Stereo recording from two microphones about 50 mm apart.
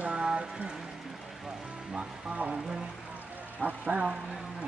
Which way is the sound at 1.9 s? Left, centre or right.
Right.